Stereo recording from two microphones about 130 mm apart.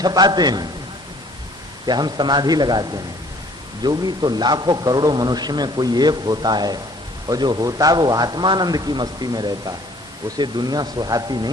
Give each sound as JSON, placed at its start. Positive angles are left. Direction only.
{"t": 0.0, "sound": "a man's voice", "side_deg": -30}
{"t": 1.9, "sound": "a man's voice", "side_deg": -35}